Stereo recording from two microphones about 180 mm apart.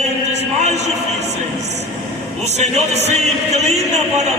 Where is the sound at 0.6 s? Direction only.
40° right (ahead or behind).